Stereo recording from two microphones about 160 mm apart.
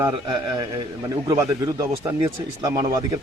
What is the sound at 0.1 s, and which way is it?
Speech, 30° right (ahead or behind).